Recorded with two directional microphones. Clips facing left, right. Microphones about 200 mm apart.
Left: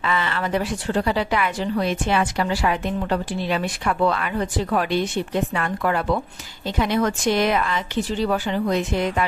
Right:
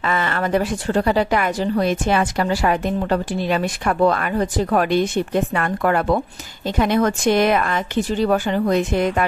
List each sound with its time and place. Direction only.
0.0 s speech: 45° right (ahead or behind)